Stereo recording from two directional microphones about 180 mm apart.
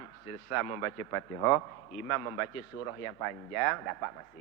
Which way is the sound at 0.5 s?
15° left (ahead or behind).